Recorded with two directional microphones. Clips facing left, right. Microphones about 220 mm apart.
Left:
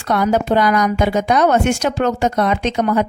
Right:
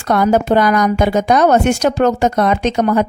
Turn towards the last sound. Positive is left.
turn(degrees=-45)  # may be behind; listen again after turning